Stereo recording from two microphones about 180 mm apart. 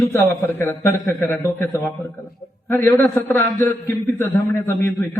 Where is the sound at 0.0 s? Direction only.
10° left (ahead or behind).